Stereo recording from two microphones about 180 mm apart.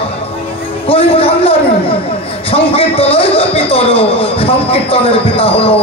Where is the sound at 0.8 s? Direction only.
30° left (ahead or behind).